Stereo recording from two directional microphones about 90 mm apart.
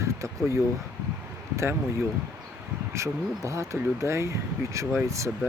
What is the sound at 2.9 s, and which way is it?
Speech, 35° right (ahead or behind).